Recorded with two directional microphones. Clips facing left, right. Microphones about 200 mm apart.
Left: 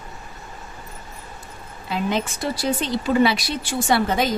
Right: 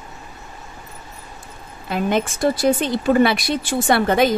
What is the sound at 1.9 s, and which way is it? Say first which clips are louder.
A woman's voice: right 3 dB; 55° right (ahead or behind).